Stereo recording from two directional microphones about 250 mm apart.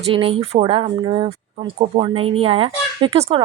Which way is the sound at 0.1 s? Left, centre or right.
Right.